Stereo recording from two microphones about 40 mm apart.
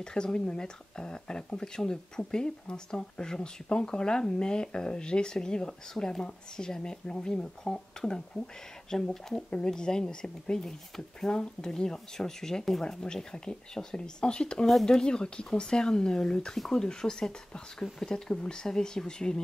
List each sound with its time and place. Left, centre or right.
0.0 s speech: left
13.0 s speech: left
14.7 s speech: centre